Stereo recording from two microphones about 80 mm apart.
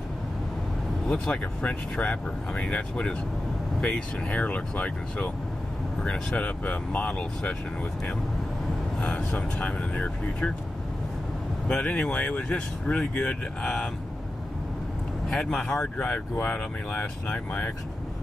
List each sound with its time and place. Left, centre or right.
1.0 s speech: centre
9.1 s speech: centre
11.6 s speech: centre
15.2 s speech: centre; by 17.7 s left